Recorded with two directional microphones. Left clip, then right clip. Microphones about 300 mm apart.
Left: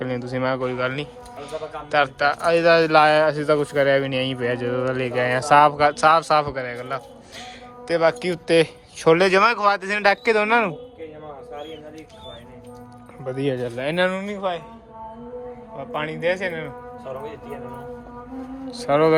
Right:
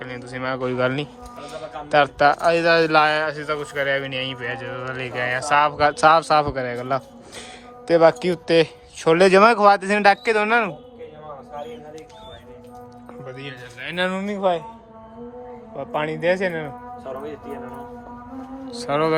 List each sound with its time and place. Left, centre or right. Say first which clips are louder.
0.0 s speech: left 4 dB; centre
13.2 s speech: left 12 dB; centre
15.8 s speech: right 2 dB; centre
17.1 s speech: right 1 dB; right
18.8 s speech: left 3 dB; centre